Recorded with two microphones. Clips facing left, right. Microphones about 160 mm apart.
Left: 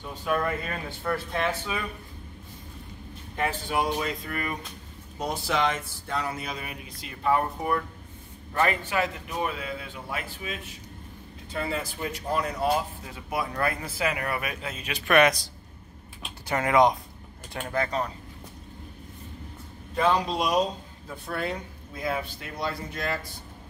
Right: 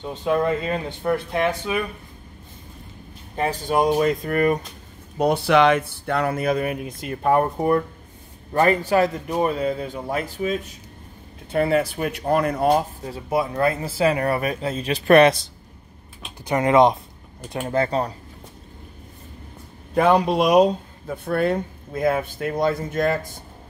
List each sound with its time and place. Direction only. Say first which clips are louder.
0.0 s speech: right 6 dB; 25° right (ahead or behind)
3.3 s speech: right 6 dB; 40° right (ahead or behind)
5.1 s speech: right 11 dB; 65° right (ahead or behind); by 10.7 s 40° right (ahead or behind)
11.5 s speech: right 11 dB; 65° right (ahead or behind)
12.7 s speech: right 7 dB; 35° right (ahead or behind)
19.9 s speech: right 7 dB; 55° right (ahead or behind)